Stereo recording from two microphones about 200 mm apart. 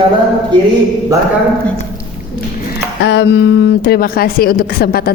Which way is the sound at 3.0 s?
60° left (ahead or behind).